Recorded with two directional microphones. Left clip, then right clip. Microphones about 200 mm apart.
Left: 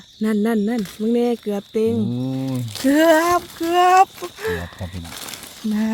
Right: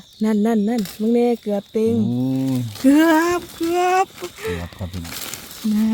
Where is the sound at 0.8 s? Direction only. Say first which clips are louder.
Right 1 dB; 10° right (ahead or behind).